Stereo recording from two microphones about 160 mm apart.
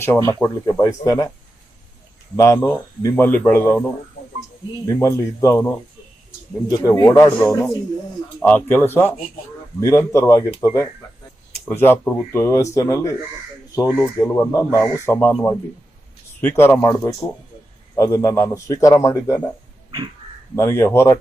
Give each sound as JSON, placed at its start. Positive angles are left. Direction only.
{"t": 0.0, "sound": "a man's voice", "side_deg": 15}
{"t": 2.3, "sound": "speech", "side_deg": 20}
{"t": 4.9, "sound": "a man's voice", "side_deg": 20}
{"t": 16.4, "sound": "a man's voice", "side_deg": 10}
{"t": 20.6, "sound": "speech", "side_deg": 15}